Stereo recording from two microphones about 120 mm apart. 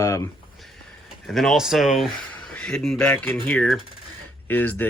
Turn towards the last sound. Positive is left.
turn(degrees=15)  # may be behind; listen again after turning